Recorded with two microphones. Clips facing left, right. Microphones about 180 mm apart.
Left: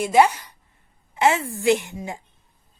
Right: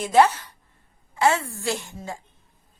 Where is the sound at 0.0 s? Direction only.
15° left (ahead or behind).